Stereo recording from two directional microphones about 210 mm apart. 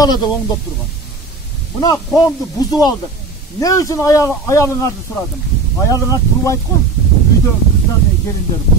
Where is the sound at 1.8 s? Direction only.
15° left (ahead or behind).